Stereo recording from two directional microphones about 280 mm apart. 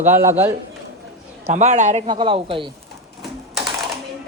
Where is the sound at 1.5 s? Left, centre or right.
Right.